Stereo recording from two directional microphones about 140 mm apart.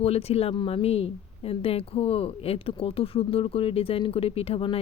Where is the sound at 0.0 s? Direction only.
45° left (ahead or behind).